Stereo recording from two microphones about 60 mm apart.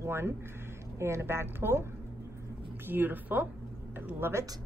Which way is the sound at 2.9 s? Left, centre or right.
Right.